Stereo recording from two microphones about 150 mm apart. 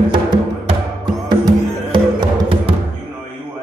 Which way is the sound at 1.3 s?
30° right (ahead or behind).